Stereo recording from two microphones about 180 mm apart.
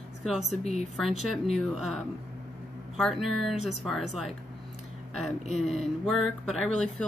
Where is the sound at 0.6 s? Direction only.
35° left (ahead or behind).